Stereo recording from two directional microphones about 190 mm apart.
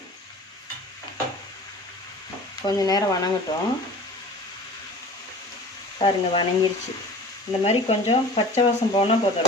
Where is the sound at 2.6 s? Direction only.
20° left (ahead or behind).